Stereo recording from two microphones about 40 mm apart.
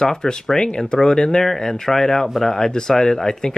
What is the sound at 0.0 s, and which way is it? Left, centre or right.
Speech, centre.